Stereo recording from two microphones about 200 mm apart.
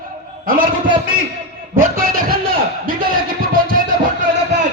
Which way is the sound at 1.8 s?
45° right (ahead or behind).